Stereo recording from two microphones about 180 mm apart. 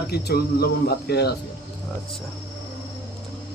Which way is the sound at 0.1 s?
60° left (ahead or behind).